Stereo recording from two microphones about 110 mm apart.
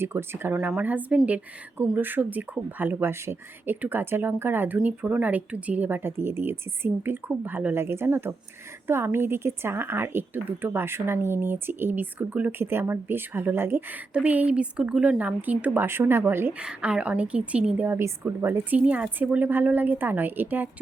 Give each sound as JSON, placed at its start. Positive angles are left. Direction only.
{"t": 0.0, "sound": "speech", "side_deg": -20}
{"t": 17.8, "sound": "speech", "side_deg": -25}